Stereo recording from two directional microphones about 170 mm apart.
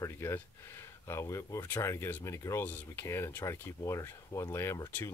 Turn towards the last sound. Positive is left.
turn(degrees=15)  # may be behind; listen again after turning